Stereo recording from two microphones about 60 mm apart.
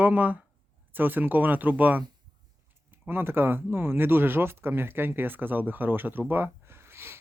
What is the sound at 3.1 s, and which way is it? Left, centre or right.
Speech, right.